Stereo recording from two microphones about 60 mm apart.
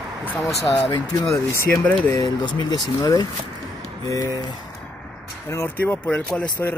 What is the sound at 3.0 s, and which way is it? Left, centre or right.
Speech, left.